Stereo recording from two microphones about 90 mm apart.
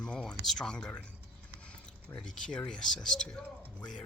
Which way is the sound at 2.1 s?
10° left (ahead or behind).